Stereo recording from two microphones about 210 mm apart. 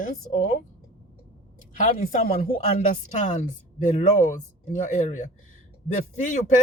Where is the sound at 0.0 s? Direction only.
40° left (ahead or behind).